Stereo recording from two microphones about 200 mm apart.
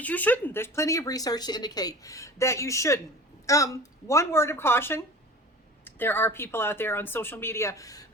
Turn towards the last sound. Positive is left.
turn(degrees=15)  # may be behind; listen again after turning